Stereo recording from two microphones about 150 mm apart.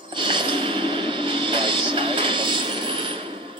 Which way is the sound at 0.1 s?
30° right (ahead or behind).